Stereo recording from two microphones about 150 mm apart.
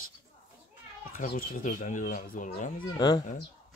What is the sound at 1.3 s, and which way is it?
Speech, 65° left (ahead or behind).